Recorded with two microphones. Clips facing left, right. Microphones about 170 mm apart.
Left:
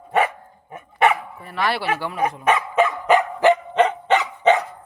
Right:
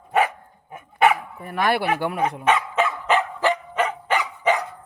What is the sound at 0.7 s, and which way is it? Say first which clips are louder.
Dog: even; centre (ahead or behind).